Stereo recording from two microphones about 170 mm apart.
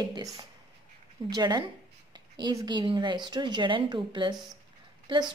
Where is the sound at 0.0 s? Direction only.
25° right (ahead or behind).